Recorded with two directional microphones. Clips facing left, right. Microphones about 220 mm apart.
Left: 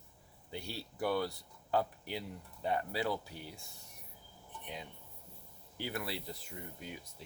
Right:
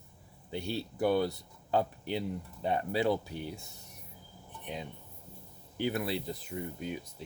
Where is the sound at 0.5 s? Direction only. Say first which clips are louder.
Right 8 dB; 25° right (ahead or behind).